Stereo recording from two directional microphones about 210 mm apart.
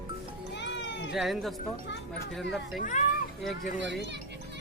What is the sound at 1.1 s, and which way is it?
Speech, centre (ahead or behind).